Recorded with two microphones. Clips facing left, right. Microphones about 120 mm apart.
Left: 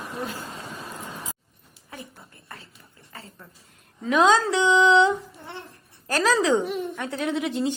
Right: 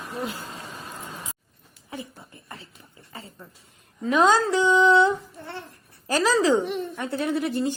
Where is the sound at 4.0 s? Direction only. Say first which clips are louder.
Even; centre (ahead or behind).